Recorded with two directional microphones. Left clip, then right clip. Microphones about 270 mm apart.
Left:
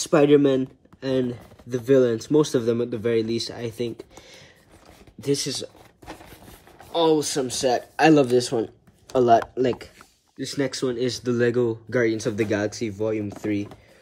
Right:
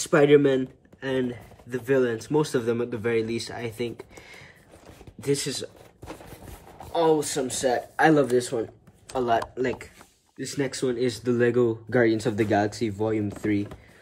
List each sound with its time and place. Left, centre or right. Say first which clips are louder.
0.0 s speech: left 1 dB; centre
5.2 s speech: left 2 dB; centre
6.9 s speech: left 2 dB; centre